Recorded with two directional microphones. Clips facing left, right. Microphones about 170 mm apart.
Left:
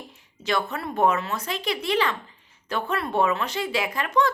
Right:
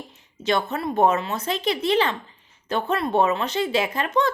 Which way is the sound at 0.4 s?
20° right (ahead or behind).